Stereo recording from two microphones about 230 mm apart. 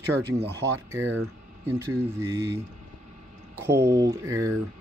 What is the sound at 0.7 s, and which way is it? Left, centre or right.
Speech, centre.